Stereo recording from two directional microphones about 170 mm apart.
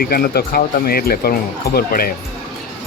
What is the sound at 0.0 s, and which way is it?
Speech, 60° left (ahead or behind).